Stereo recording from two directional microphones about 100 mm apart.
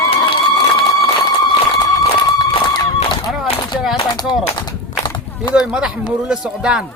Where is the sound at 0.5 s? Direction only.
40° left (ahead or behind).